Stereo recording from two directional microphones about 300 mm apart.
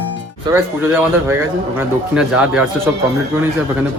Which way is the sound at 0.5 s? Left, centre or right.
Centre.